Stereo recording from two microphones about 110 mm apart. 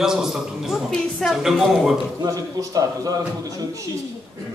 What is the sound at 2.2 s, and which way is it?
A man's voice, 35° right (ahead or behind).